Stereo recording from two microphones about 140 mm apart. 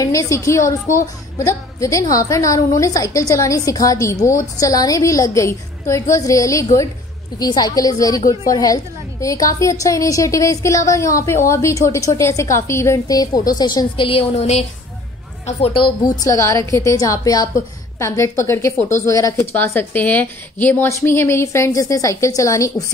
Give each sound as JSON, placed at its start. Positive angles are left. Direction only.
{"t": 0.0, "sound": "a woman's voice", "side_deg": 25}
{"t": 16.0, "sound": "a woman's voice", "side_deg": 25}
{"t": 18.8, "sound": "speech", "side_deg": 60}
{"t": 19.0, "sound": "a woman's voice", "side_deg": 25}